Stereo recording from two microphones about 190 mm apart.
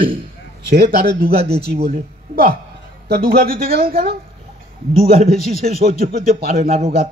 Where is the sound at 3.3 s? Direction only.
50° right (ahead or behind).